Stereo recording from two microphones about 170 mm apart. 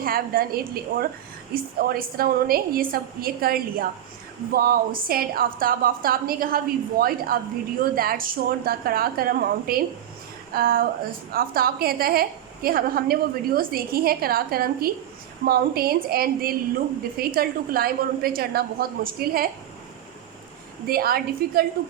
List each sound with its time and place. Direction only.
0.0 s a woman's voice: 60° right (ahead or behind)
20.8 s a woman's voice: 65° right (ahead or behind)